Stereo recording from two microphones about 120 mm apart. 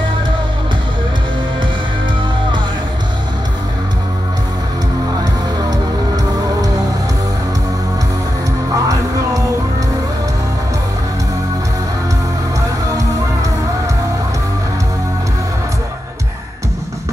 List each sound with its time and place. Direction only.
8.7 s music: 30° right (ahead or behind)